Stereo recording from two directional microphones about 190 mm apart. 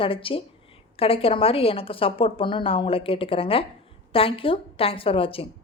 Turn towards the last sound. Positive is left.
turn(degrees=30)  # may be behind; listen again after turning